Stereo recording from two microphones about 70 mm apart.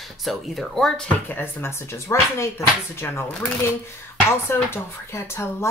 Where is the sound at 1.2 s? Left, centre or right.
Left.